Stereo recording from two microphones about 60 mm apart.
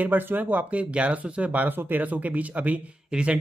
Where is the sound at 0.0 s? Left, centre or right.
Right.